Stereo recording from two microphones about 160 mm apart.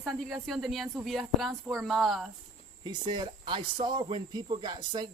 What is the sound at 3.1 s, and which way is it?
Speech, 30° right (ahead or behind).